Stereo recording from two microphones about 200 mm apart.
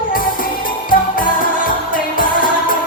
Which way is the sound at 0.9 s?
45° left (ahead or behind).